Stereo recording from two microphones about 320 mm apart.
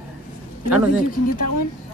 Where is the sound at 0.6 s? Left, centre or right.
Centre.